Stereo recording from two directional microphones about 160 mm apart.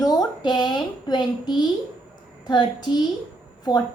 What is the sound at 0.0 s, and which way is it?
A woman's voice, 25° left (ahead or behind).